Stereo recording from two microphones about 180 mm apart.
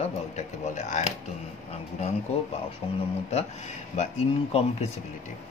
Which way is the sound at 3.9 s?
40° left (ahead or behind).